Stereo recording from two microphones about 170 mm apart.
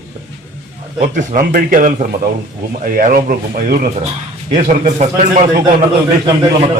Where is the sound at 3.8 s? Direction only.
40° right (ahead or behind).